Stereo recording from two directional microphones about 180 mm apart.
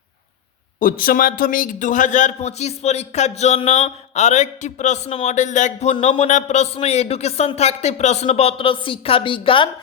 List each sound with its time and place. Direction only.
0.8 s a man's voice: 50° left (ahead or behind); by 9.6 s 30° left (ahead or behind)